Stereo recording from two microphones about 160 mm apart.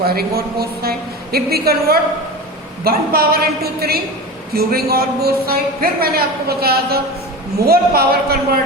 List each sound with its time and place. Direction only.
0.0 s a woman's voice: 70° right (ahead or behind)